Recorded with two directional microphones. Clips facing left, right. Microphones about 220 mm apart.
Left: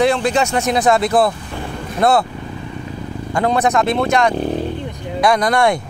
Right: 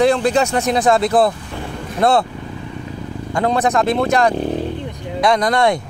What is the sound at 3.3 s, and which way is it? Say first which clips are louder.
Speech: left 1 dB; 30° right (ahead or behind).